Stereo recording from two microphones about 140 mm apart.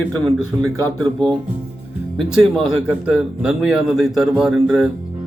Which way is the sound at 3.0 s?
5° right (ahead or behind).